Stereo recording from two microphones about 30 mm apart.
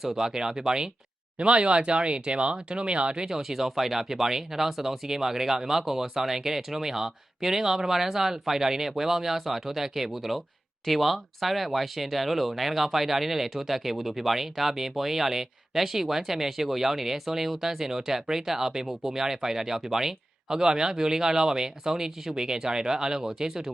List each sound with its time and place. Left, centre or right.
0.0 s speech: centre
1.4 s speech: right
3.2 s speech: centre